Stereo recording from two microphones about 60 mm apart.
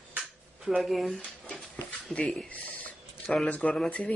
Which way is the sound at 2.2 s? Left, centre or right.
Centre.